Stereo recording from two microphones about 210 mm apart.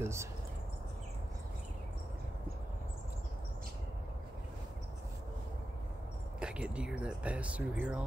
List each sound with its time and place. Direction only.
0.0 s speech: 10° right (ahead or behind)
6.4 s speech: 5° right (ahead or behind)